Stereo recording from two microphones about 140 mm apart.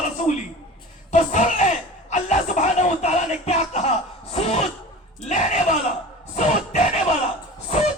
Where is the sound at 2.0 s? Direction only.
55° left (ahead or behind).